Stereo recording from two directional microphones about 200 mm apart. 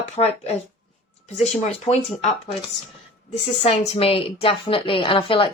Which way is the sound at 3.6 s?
30° left (ahead or behind).